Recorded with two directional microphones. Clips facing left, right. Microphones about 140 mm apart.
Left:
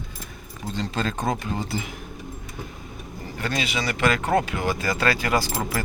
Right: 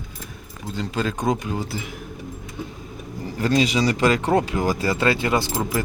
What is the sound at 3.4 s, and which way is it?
Speech, 35° right (ahead or behind).